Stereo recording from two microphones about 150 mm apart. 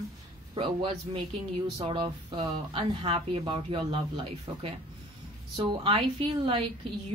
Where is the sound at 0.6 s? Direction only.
35° right (ahead or behind).